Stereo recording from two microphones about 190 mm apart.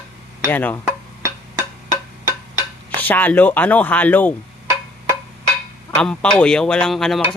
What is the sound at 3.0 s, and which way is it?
Speech, 10° left (ahead or behind).